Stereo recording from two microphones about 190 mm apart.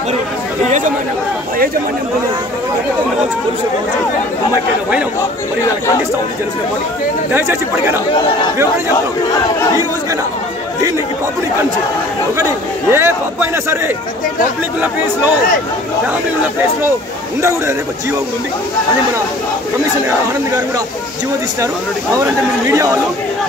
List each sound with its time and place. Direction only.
0.7 s speech: 40° right (ahead or behind)
7.3 s a man's voice: 15° right (ahead or behind)
12.9 s a man's voice: 15° right (ahead or behind)
17.4 s a man's voice: 15° right (ahead or behind)
22.2 s a man's voice: 15° right (ahead or behind)